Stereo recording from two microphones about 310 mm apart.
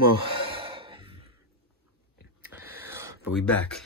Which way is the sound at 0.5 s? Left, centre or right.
Centre.